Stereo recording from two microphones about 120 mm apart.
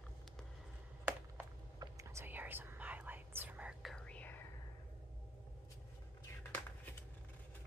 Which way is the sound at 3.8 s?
10° left (ahead or behind).